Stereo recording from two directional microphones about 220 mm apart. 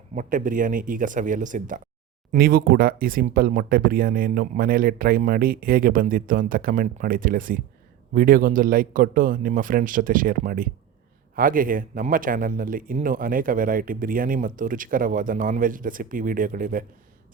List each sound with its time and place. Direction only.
0.1 s a man's voice: 35° right (ahead or behind)